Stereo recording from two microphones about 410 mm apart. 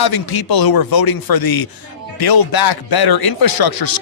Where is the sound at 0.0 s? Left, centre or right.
Left.